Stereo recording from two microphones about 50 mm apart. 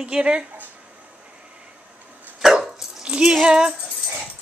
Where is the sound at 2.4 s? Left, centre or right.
Centre.